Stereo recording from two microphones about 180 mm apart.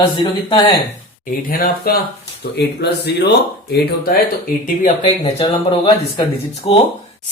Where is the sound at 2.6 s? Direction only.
65° left (ahead or behind).